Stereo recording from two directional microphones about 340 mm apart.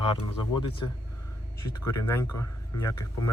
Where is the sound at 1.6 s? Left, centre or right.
Left.